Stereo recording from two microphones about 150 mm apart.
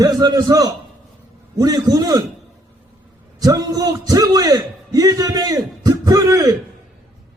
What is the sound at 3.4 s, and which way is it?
A man's voice, 25° right (ahead or behind).